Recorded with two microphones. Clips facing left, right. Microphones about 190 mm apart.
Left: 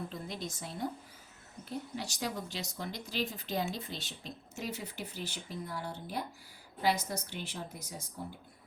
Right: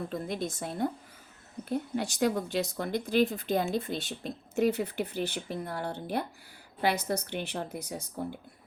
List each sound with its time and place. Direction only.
0.1 s speech: 55° right (ahead or behind)